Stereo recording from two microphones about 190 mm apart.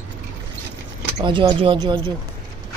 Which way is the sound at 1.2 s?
25° right (ahead or behind).